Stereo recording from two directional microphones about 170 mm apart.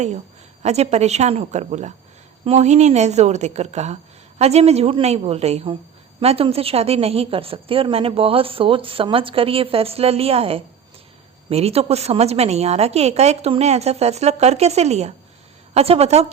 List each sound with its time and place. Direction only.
0.6 s a woman's voice: 40° right (ahead or behind)